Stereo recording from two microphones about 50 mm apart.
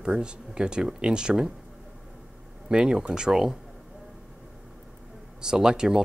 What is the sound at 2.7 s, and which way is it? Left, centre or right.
Speech, centre.